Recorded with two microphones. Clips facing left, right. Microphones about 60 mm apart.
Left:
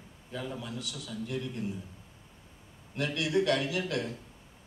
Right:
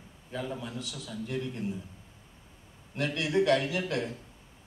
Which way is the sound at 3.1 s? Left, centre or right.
Right.